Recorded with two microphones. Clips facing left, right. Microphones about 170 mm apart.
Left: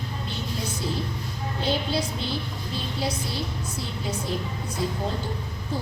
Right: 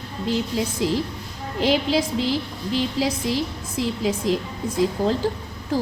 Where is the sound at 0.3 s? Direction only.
90° right.